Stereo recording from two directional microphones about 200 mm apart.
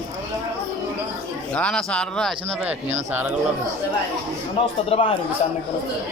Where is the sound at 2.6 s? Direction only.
10° right (ahead or behind).